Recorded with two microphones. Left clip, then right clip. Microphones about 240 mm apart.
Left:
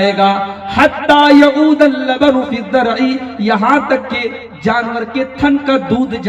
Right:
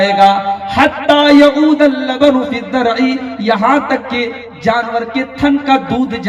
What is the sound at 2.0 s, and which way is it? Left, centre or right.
A man's voice, right.